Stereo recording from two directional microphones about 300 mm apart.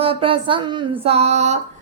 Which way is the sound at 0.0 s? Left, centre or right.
Centre.